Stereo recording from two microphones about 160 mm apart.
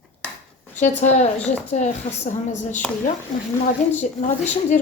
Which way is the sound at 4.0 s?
45° left (ahead or behind).